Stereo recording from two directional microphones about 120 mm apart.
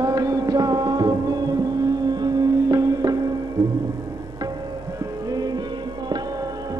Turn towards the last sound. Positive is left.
turn(degrees=-30)  # may be behind; listen again after turning